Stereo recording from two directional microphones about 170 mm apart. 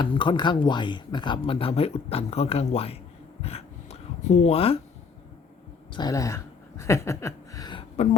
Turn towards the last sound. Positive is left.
turn(degrees=25)  # may be behind; listen again after turning